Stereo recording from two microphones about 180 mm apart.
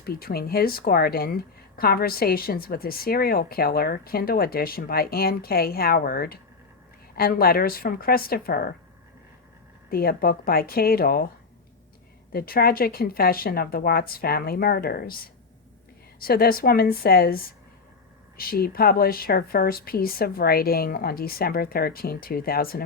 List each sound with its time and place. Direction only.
0.0 s a woman's voice: 55° left (ahead or behind)
9.9 s a woman's voice: 55° left (ahead or behind)
12.3 s a woman's voice: 55° left (ahead or behind)